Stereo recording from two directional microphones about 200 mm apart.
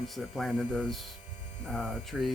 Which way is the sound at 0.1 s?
Centre (ahead or behind).